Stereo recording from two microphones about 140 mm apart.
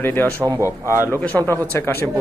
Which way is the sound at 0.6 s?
20° right (ahead or behind).